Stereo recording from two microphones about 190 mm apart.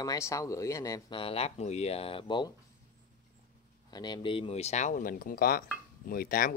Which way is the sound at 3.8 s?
20° left (ahead or behind).